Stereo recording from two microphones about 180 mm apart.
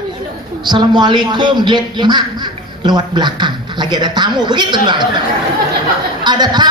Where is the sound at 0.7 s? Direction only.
25° right (ahead or behind).